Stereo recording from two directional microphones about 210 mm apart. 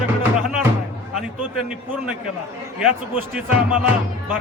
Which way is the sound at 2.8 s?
5° right (ahead or behind).